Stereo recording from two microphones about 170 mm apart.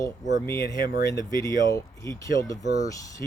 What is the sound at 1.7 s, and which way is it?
Speech, 20° left (ahead or behind).